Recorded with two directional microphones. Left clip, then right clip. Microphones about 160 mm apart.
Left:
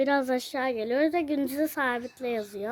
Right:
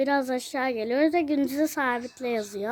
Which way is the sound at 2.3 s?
15° right (ahead or behind).